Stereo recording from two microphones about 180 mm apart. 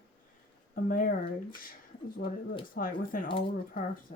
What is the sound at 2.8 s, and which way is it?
Speech, 50° left (ahead or behind).